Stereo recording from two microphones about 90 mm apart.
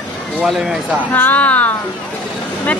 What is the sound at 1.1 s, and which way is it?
Speech, 20° left (ahead or behind).